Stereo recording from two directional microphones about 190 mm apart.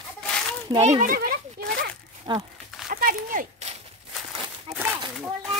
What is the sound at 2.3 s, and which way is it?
Speech, 20° right (ahead or behind).